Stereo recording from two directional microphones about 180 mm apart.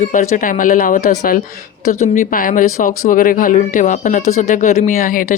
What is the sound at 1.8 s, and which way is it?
Speech, 40° left (ahead or behind).